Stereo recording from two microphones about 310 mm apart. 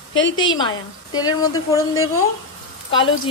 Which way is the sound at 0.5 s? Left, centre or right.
Centre.